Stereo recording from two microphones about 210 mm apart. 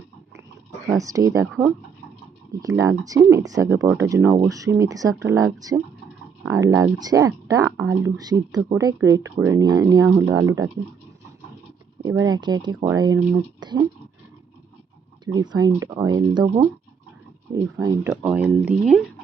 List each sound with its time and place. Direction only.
0.9 s speech: 15° right (ahead or behind)
1.5 s speech: centre (ahead or behind)
2.5 s speech: 15° right (ahead or behind)
12.0 s speech: 15° right (ahead or behind)
15.2 s speech: 20° right (ahead or behind); by 19.0 s 5° right (ahead or behind)